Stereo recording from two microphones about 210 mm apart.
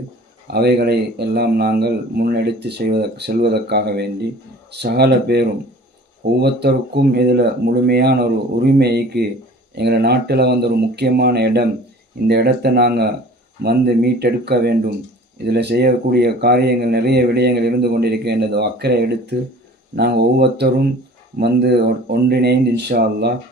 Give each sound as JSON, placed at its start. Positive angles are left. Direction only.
{"t": 0.5, "sound": "speech", "side_deg": -50}